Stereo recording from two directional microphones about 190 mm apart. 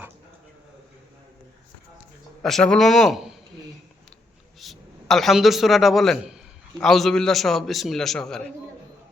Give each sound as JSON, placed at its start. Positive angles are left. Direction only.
{"t": 2.4, "sound": "a man's voice", "side_deg": 0}
{"t": 4.6, "sound": "a man's voice", "side_deg": 0}